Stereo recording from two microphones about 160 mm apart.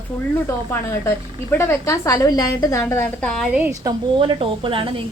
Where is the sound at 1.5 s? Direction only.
20° left (ahead or behind).